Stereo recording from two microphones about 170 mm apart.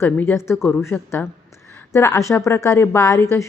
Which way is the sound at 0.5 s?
Centre (ahead or behind).